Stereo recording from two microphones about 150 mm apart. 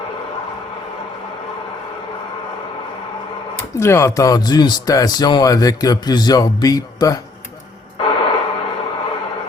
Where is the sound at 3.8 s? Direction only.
20° left (ahead or behind).